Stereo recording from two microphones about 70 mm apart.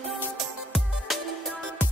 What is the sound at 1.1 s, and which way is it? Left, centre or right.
Music, centre.